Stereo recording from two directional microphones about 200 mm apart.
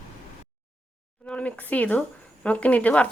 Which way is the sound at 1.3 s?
5° left (ahead or behind).